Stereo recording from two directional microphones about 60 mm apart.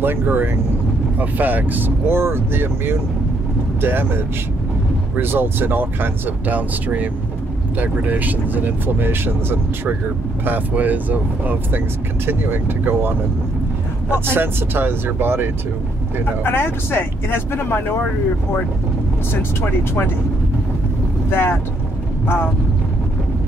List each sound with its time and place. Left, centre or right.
0.0 s speech: right
10.4 s speech: right
14.3 s speech: right
16.4 s speech: left
19.6 s speech: left
21.3 s speech: left